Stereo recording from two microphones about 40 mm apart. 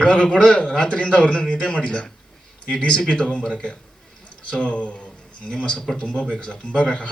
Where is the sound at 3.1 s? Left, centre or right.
Left.